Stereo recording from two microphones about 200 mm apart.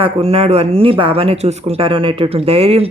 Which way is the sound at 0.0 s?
30° right (ahead or behind).